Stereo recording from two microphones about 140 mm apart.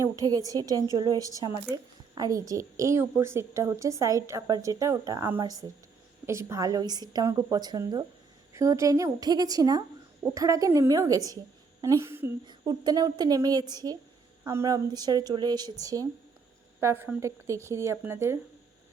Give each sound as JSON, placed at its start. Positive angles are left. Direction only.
{"t": 0.0, "sound": "a woman's voice", "side_deg": -25}
{"t": 12.5, "sound": "a woman's voice", "side_deg": -30}